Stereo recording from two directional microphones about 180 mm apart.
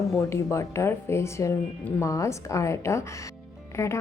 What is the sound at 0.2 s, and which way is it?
A woman's voice, 15° left (ahead or behind).